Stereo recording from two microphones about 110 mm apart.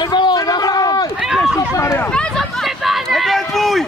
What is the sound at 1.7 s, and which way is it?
Speech, 25° left (ahead or behind).